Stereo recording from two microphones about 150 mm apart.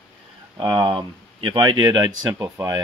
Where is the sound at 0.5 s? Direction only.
35° right (ahead or behind).